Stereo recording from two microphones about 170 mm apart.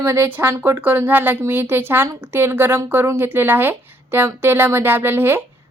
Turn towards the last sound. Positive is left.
turn(degrees=-15)  # may be behind; listen again after turning